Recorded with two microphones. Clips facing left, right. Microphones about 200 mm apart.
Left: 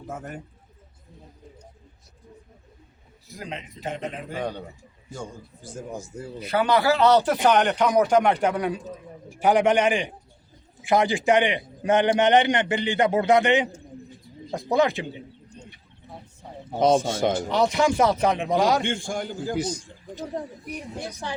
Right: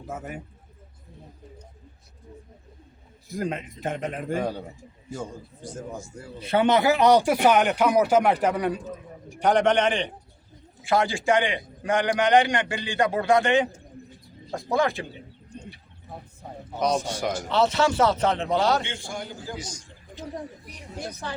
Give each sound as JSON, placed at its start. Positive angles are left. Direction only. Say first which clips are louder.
{"t": 0.1, "sound": "a man's voice", "louder": "right 1 dB", "side_deg": -5}
{"t": 3.3, "sound": "speech", "louder": "right 7 dB", "side_deg": -50}
{"t": 4.4, "sound": "a man's voice", "louder": "right 1 dB", "side_deg": -5}
{"t": 5.6, "sound": "speech", "louder": "left 1 dB", "side_deg": 10}
{"t": 6.4, "sound": "a man's voice", "louder": "right 1 dB", "side_deg": -25}
{"t": 15.5, "sound": "bird", "louder": "right 5 dB", "side_deg": -55}
{"t": 17.1, "sound": "a man's voice", "louder": "left 5 dB", "side_deg": 25}
{"t": 17.5, "sound": "speech", "louder": "right 3 dB", "side_deg": 15}
{"t": 18.8, "sound": "a man's voice", "louder": "left 6 dB", "side_deg": 50}